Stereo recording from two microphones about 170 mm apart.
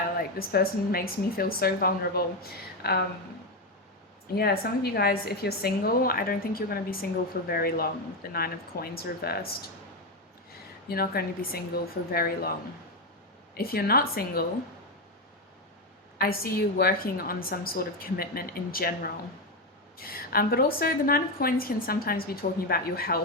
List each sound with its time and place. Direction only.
0.2 s a woman's voice: 60° left (ahead or behind)
4.4 s a woman's voice: 65° left (ahead or behind)
10.8 s a woman's voice: 65° left (ahead or behind)
16.2 s a woman's voice: 60° left (ahead or behind)